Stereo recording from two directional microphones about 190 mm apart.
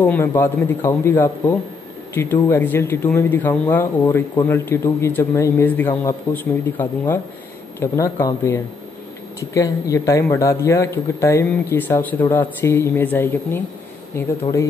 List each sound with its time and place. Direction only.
0.0 s a man's voice: 10° left (ahead or behind)